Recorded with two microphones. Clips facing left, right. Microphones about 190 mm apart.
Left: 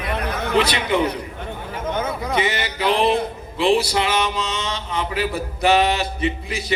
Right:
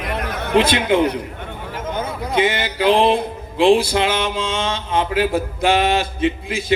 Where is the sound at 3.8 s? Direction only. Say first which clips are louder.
Right 2 dB; 50° right (ahead or behind).